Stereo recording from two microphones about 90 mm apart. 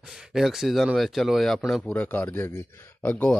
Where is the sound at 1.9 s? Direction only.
15° left (ahead or behind).